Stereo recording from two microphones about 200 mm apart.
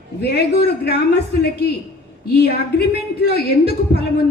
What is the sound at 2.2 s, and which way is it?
A woman's voice, 50° left (ahead or behind).